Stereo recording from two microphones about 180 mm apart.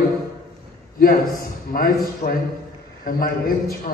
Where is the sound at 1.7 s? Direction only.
55° left (ahead or behind).